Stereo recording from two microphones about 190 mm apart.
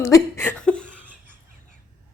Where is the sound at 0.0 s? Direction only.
15° left (ahead or behind).